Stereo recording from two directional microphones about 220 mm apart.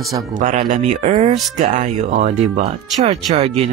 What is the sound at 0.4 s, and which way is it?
Speech, 35° right (ahead or behind).